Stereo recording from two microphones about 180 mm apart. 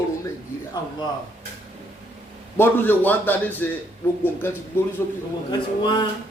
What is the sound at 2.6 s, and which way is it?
A man's voice, 10° left (ahead or behind).